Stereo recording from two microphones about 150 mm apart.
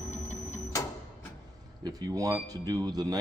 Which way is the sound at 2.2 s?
25° right (ahead or behind).